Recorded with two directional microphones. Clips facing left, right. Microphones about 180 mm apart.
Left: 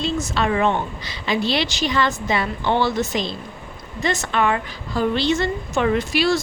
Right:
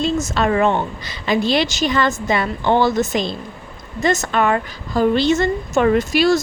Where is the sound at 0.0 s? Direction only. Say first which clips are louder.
Right 4 dB; 45° right (ahead or behind).